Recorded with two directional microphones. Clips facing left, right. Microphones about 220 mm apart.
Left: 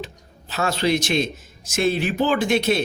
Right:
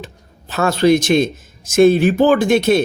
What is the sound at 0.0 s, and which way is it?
Speech, 50° right (ahead or behind).